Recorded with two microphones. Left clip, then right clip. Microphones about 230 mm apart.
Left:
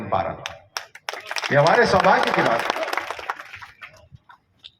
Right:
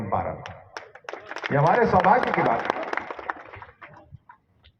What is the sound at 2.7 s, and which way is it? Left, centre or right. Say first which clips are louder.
Applause: left 3 dB; right.